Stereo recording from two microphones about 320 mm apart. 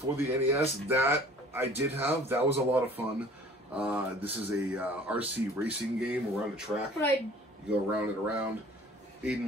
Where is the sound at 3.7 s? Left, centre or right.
Centre.